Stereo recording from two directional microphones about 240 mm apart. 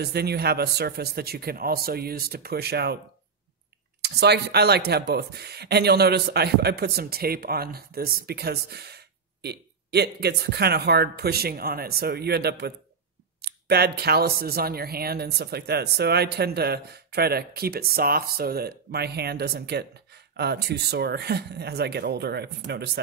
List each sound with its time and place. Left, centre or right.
0.0 s speech: right
4.0 s speech: right